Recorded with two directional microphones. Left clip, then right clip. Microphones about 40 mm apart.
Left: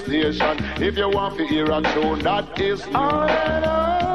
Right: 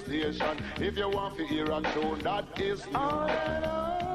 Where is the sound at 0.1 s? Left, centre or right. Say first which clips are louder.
Left 11 dB; left.